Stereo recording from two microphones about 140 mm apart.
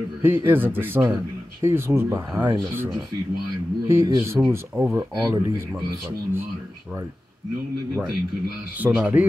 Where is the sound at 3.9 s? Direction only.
20° right (ahead or behind).